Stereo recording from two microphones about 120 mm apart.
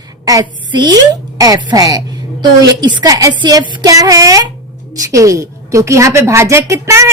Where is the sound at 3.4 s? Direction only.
40° right (ahead or behind).